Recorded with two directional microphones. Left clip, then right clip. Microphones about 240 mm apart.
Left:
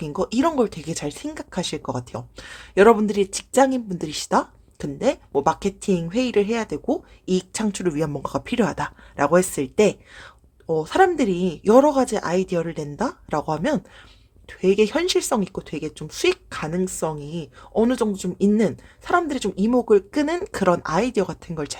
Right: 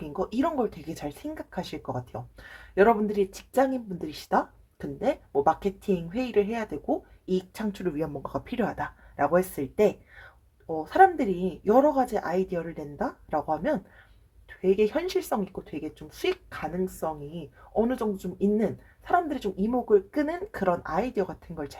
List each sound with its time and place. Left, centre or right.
0.0 s speech: left